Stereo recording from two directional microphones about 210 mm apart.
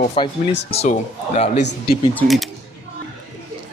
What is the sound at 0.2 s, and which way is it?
Speech, 25° left (ahead or behind).